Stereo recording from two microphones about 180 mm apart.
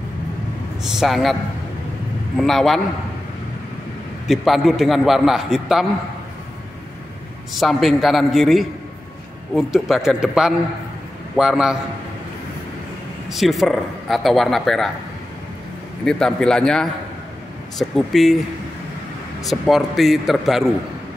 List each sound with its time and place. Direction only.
0.8 s speech: centre (ahead or behind)
2.3 s speech: centre (ahead or behind)
4.3 s speech: centre (ahead or behind)
7.5 s speech: centre (ahead or behind)
13.3 s speech: centre (ahead or behind)
16.1 s speech: 5° left (ahead or behind)
19.4 s speech: centre (ahead or behind)